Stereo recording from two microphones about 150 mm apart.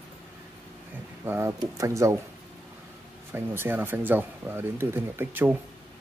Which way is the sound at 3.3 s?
15° right (ahead or behind).